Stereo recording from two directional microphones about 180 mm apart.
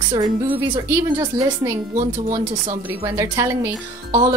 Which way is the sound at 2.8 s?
15° right (ahead or behind).